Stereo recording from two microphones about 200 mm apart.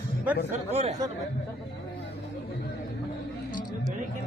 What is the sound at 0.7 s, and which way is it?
Speech, 35° right (ahead or behind).